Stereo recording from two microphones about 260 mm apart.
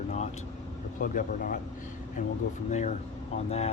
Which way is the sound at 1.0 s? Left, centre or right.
Left.